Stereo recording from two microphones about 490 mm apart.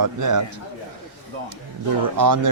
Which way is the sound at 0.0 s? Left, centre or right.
Right.